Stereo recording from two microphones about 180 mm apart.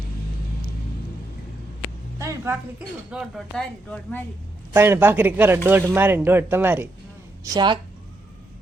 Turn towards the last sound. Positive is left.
turn(degrees=-25)  # may be behind; listen again after turning